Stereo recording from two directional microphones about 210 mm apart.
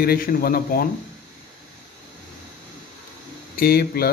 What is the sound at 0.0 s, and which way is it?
Speech, 45° left (ahead or behind).